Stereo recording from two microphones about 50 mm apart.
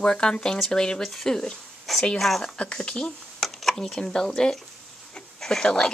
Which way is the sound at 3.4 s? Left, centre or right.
Centre.